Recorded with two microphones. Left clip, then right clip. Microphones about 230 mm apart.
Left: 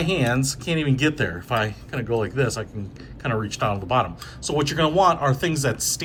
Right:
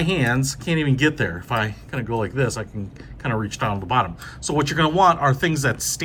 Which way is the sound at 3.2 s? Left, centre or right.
Right.